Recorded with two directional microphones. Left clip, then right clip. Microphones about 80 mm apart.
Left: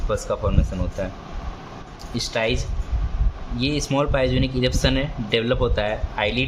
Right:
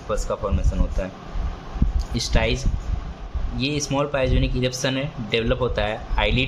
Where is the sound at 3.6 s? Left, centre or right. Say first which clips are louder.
Left 1 dB; centre.